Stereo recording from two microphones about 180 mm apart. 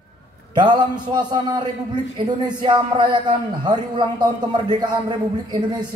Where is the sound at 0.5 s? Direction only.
25° right (ahead or behind).